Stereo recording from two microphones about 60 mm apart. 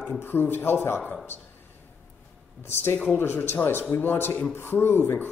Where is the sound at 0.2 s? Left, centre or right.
Left.